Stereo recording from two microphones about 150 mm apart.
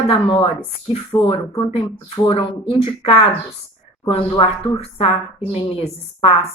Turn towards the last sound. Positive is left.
turn(degrees=40)  # may be behind; listen again after turning